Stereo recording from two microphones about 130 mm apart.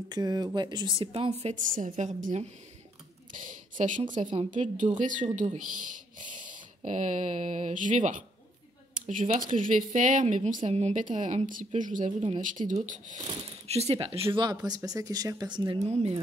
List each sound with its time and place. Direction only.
0.1 s speech: 30° right (ahead or behind)
1.5 s a woman's voice: 90° right; by 2.4 s 65° right (ahead or behind)
3.4 s speech: 75° right (ahead or behind)
8.9 s a sound: 85° right
9.4 s speech: 90° right; by 10.7 s 70° right (ahead or behind)
10.7 s speech: 55° right (ahead or behind)
13.7 s speech: 55° right (ahead or behind); by 15.8 s 35° right (ahead or behind)
15.9 s speech: 55° right (ahead or behind)